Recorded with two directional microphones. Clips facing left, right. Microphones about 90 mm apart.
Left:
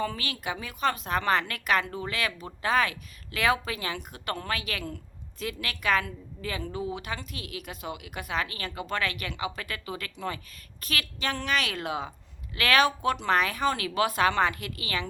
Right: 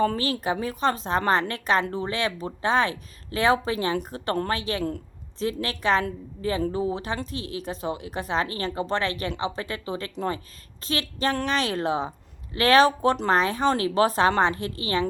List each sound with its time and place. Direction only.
0.0 s speech: 35° right (ahead or behind)